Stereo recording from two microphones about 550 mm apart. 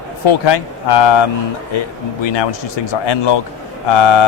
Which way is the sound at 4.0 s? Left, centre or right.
Left.